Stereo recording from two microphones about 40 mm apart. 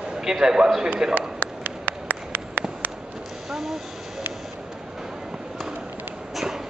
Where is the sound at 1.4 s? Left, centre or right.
Right.